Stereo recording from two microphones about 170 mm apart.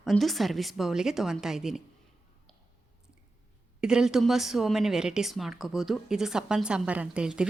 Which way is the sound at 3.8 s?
5° right (ahead or behind).